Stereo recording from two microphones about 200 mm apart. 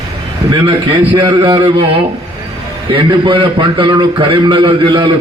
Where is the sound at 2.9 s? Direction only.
25° right (ahead or behind).